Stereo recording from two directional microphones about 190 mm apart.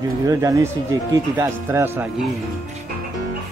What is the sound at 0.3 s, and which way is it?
Speech, 15° right (ahead or behind).